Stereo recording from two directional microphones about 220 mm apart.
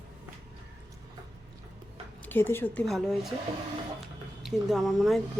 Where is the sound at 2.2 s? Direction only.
10° left (ahead or behind).